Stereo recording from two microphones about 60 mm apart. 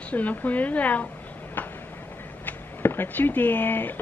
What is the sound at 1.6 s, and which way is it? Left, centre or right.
Tick-tock, left.